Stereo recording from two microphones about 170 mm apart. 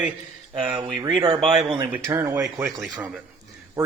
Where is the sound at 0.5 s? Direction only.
25° right (ahead or behind).